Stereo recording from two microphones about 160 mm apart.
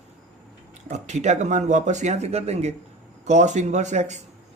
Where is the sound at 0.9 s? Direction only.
45° right (ahead or behind).